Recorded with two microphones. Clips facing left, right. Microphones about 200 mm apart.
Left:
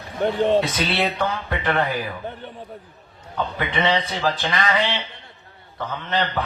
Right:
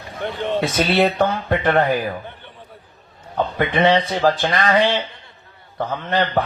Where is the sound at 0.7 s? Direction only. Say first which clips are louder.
Right 6 dB; 50° right (ahead or behind).